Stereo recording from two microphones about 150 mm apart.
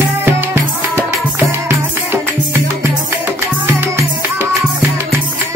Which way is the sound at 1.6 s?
15° right (ahead or behind).